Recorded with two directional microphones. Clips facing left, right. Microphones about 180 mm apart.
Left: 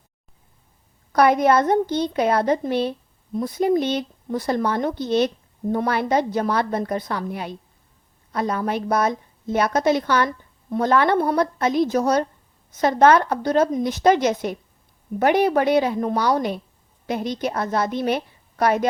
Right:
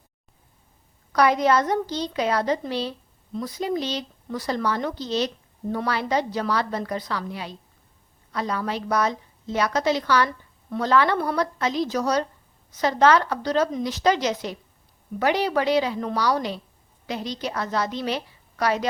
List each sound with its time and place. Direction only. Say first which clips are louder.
1.1 s a woman's voice: left 3 dB; 55° left (ahead or behind)